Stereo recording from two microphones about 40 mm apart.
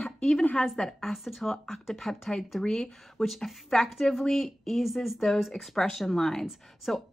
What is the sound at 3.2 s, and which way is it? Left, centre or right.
Speech, left.